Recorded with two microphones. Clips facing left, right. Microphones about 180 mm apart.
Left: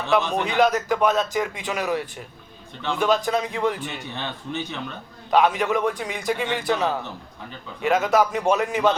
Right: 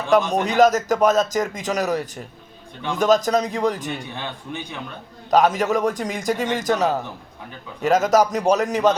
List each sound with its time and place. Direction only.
0.1 s a man's voice: 45° right (ahead or behind)
5.3 s a man's voice: 40° right (ahead or behind)